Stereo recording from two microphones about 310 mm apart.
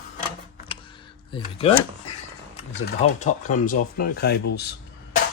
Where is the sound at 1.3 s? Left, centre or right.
Centre.